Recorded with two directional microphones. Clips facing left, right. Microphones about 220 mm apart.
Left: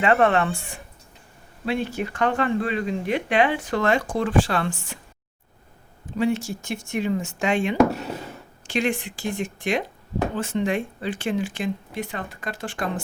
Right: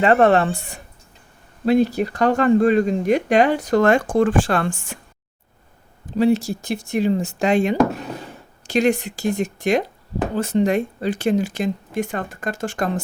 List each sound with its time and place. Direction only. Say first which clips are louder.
0.0 s speech: right 4 dB; 40° right (ahead or behind)
6.1 s speech: right 6 dB; 35° right (ahead or behind)